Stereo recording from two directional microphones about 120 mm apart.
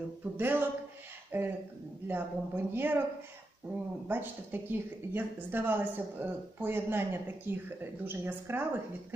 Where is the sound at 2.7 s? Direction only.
20° right (ahead or behind).